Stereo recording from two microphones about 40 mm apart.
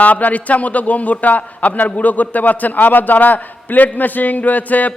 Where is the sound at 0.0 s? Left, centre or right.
Left.